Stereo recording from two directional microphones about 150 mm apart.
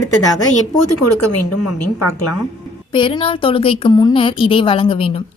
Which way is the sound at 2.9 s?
35° left (ahead or behind).